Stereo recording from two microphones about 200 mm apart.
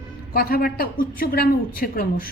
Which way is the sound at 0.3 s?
50° left (ahead or behind).